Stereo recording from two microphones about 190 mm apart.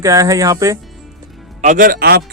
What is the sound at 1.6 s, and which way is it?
Speech, 40° right (ahead or behind).